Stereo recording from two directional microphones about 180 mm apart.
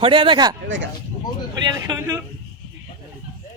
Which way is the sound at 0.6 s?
90° right.